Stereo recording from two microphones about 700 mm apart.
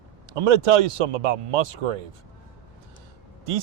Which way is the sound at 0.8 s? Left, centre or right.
Right.